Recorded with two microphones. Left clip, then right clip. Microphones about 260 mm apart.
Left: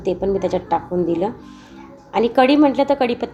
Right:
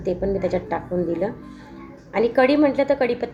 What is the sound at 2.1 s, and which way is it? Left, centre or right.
Speech, left.